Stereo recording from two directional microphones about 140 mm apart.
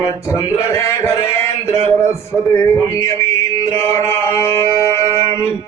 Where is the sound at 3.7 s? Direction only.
20° left (ahead or behind).